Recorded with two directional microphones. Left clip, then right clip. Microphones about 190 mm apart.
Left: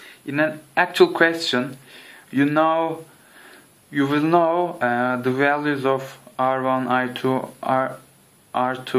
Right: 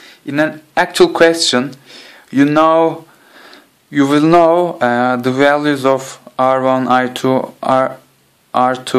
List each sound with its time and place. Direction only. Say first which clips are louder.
0.3 s speech: right 6 dB; 40° right (ahead or behind)